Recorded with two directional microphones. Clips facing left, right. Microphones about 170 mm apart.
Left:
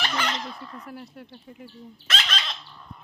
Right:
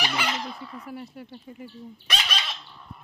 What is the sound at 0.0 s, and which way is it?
Fowl, 10° right (ahead or behind).